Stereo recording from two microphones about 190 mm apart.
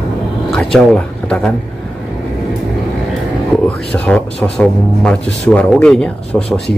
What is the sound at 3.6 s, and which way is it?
Speech, 5° left (ahead or behind).